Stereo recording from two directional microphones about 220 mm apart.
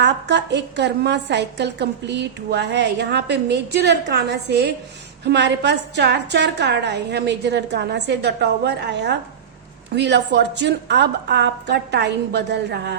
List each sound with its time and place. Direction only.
0.0 s a woman's voice: 50° right (ahead or behind)